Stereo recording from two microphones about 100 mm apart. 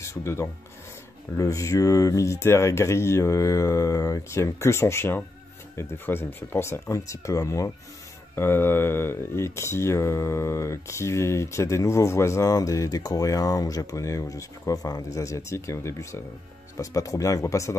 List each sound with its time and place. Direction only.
0.0 s filing: 30° left (ahead or behind)
1.3 s speech: 35° left (ahead or behind)